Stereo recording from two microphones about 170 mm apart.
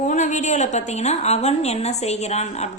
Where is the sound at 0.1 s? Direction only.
45° left (ahead or behind).